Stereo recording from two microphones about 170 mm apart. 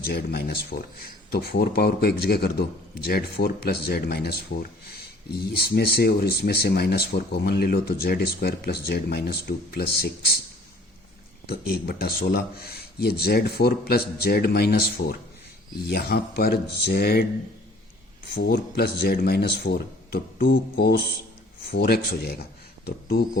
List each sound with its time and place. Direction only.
0.0 s speech: 70° left (ahead or behind)
11.4 s speech: 65° left (ahead or behind)
18.3 s speech: 65° left (ahead or behind)